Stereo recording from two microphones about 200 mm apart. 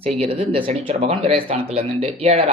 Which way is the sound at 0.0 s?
30° right (ahead or behind).